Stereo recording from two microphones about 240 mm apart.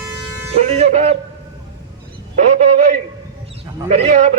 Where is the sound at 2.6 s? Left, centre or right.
Right.